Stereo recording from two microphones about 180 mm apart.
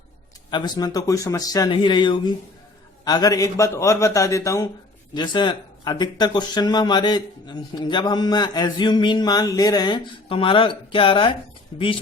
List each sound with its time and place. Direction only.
0.5 s a man's voice: 25° left (ahead or behind)